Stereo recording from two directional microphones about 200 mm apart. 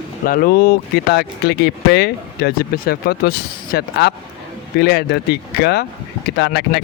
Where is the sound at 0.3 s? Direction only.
50° left (ahead or behind).